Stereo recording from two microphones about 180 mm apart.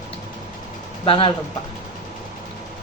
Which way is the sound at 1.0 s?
30° left (ahead or behind).